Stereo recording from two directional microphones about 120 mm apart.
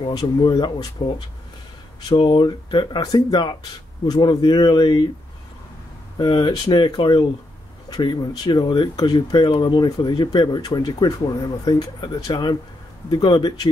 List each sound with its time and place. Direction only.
0.0 s speech: 40° left (ahead or behind)
6.1 s speech: 40° left (ahead or behind)